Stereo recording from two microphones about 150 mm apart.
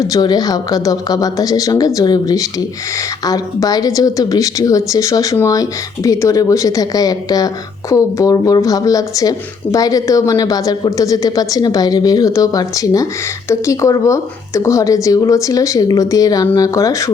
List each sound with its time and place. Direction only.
0.0 s a woman's voice: 25° left (ahead or behind)